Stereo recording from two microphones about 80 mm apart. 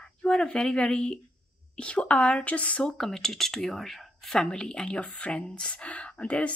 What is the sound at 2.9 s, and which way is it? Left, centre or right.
Speech, centre.